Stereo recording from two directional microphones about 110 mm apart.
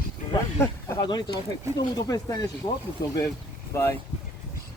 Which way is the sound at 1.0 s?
40° left (ahead or behind).